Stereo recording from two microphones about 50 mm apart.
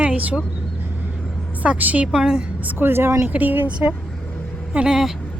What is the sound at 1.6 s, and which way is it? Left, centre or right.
Speech, right.